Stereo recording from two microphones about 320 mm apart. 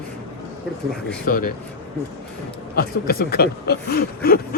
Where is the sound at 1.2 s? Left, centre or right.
Left.